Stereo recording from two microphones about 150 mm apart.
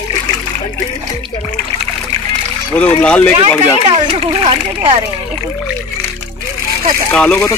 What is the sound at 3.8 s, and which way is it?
Speech, 35° right (ahead or behind).